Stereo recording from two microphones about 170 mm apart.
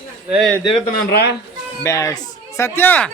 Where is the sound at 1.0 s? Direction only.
70° left (ahead or behind).